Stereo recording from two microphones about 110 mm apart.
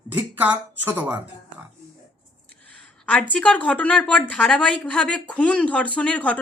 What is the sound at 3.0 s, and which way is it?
A woman's voice, 10° left (ahead or behind).